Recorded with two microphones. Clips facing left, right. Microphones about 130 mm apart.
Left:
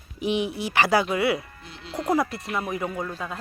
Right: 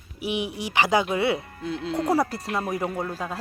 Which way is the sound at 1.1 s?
25° right (ahead or behind).